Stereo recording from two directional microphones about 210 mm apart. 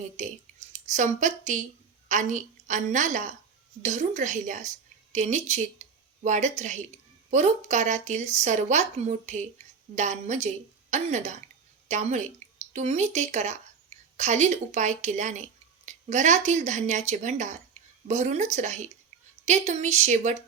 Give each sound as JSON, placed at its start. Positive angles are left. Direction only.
{"t": 0.2, "sound": "speech", "side_deg": -35}